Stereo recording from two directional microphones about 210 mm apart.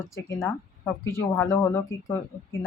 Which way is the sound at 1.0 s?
15° left (ahead or behind).